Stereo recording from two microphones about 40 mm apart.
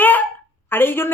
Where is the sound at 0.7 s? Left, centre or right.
Left.